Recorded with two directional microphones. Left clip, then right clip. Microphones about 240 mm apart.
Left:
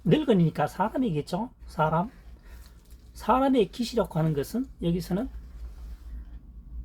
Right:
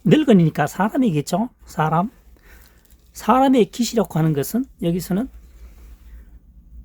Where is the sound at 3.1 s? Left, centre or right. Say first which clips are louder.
Right 7 dB; right.